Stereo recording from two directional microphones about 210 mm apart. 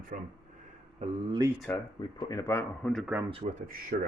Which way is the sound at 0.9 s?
30° right (ahead or behind).